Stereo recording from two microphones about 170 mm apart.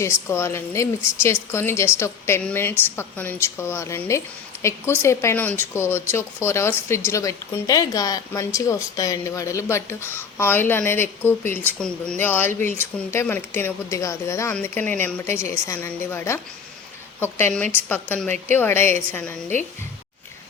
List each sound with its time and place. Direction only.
0.0 s speech: 15° left (ahead or behind)